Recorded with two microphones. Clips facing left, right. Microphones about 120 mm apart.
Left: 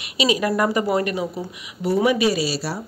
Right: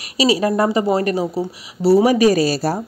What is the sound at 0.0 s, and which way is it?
A woman's voice, 35° right (ahead or behind).